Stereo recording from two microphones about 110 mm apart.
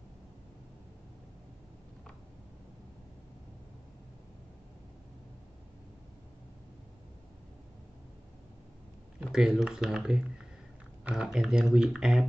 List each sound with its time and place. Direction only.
9.2 s speech: 5° right (ahead or behind)